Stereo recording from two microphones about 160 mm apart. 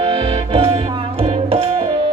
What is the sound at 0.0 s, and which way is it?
Music, 35° right (ahead or behind).